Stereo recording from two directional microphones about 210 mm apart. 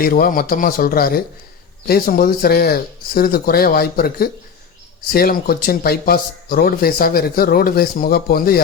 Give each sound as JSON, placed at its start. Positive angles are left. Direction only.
{"t": 0.0, "sound": "speech", "side_deg": 45}